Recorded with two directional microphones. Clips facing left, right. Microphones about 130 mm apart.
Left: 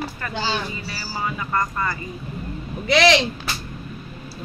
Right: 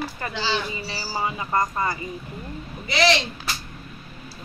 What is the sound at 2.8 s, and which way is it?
Speech, 60° left (ahead or behind).